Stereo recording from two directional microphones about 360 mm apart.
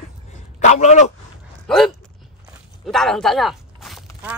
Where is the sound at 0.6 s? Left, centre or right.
Centre.